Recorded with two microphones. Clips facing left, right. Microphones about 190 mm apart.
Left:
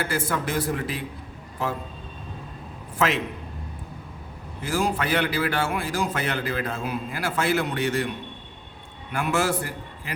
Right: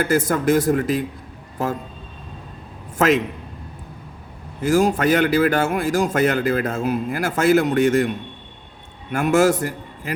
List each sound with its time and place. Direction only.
0.0 s a man's voice: 45° right (ahead or behind)
3.0 s a man's voice: 45° right (ahead or behind)
4.6 s a man's voice: 45° right (ahead or behind)
9.1 s a man's voice: 45° right (ahead or behind)